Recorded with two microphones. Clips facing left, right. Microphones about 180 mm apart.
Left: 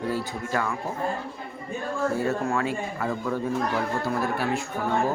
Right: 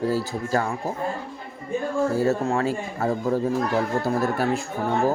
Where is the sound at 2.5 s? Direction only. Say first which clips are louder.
Right 3 dB; 35° right (ahead or behind).